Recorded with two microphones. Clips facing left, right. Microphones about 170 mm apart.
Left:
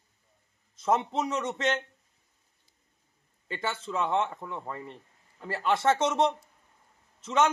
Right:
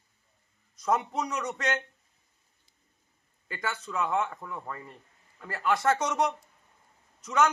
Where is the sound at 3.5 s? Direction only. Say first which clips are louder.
Left 2 dB; 25° left (ahead or behind).